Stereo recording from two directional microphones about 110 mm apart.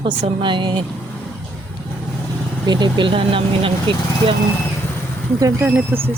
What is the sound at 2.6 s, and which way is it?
Speech, 40° right (ahead or behind).